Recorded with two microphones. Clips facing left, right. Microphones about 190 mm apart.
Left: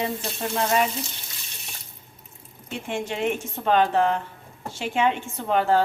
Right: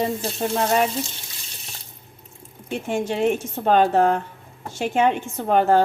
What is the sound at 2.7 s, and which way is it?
A woman's voice, 40° right (ahead or behind).